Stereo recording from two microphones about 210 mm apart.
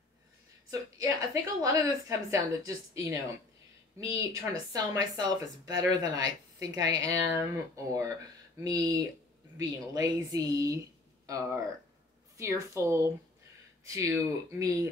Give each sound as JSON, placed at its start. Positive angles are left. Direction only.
{"t": 0.7, "sound": "speech", "side_deg": -15}
{"t": 9.6, "sound": "speech", "side_deg": -15}